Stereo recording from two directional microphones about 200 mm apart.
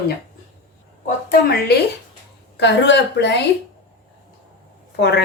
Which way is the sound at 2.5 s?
60° left (ahead or behind).